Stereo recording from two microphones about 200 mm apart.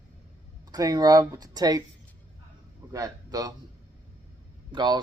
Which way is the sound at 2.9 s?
15° right (ahead or behind).